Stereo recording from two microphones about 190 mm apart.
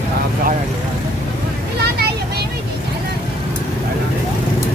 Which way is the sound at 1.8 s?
60° right (ahead or behind).